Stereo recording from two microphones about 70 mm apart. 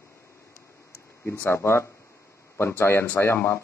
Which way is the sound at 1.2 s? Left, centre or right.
Left.